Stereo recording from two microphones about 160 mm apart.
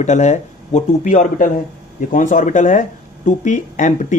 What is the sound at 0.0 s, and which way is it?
Speech, 45° left (ahead or behind).